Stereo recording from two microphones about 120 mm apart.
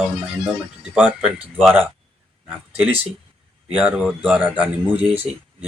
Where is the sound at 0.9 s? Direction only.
10° right (ahead or behind).